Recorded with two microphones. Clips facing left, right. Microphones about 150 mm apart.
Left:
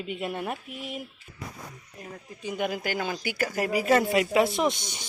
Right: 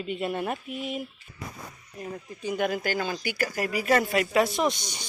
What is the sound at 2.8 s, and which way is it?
Speech, 15° left (ahead or behind).